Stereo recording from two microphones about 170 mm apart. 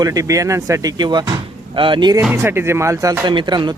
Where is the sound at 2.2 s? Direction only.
10° right (ahead or behind).